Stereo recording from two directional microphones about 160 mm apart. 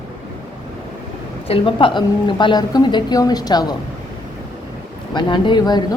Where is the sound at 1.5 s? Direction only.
35° left (ahead or behind).